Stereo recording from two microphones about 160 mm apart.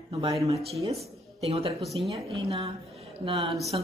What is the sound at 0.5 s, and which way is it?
A woman's voice, 40° right (ahead or behind).